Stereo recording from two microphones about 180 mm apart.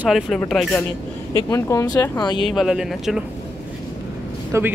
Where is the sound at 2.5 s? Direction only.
Centre (ahead or behind).